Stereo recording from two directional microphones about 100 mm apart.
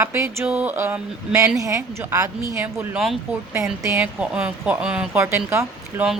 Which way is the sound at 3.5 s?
25° right (ahead or behind).